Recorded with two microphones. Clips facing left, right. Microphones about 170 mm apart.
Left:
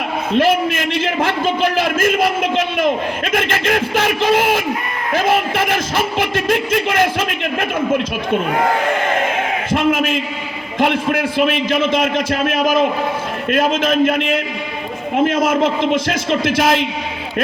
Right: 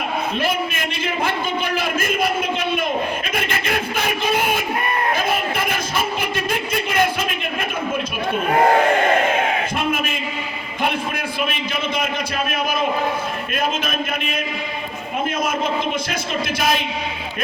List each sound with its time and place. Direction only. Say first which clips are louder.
0.3 s a man's voice: left 12 dB; 90° left
9.7 s a sound: left 7 dB; 90° left
10.8 s a man's voice: left 7 dB; 90° left